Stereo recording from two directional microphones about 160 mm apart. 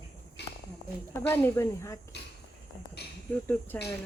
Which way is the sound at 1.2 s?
15° left (ahead or behind).